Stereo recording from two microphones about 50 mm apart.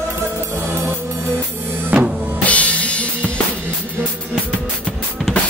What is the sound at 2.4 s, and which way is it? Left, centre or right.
Drum kit, left.